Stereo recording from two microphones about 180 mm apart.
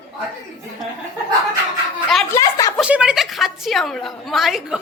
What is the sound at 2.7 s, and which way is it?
A woman's voice, 5° right (ahead or behind).